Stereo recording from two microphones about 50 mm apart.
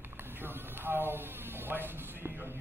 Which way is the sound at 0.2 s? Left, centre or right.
Right.